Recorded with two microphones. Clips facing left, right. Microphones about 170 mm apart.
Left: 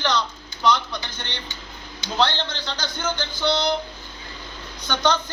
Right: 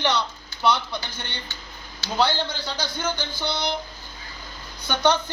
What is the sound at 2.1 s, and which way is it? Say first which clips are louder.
A man's voice: even; 10° right (ahead or behind).